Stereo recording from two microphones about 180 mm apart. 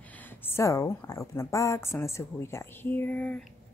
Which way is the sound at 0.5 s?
15° left (ahead or behind).